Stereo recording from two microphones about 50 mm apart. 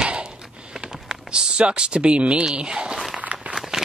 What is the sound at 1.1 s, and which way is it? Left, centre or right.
Speech, centre.